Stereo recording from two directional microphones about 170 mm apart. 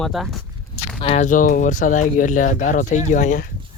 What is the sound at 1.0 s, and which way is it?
Speech, 35° left (ahead or behind).